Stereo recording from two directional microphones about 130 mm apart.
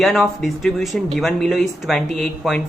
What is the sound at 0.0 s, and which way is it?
Speech, centre (ahead or behind).